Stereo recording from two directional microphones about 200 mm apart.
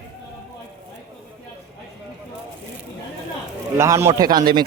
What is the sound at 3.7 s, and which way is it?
Speech, 15° right (ahead or behind).